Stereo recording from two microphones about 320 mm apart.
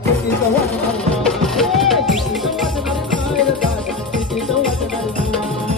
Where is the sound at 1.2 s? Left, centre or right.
Centre.